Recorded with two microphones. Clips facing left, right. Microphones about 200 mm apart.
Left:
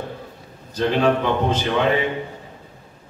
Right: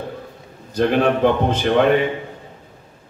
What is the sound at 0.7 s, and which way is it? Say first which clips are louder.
A man's voice: right 2 dB; 55° right (ahead or behind).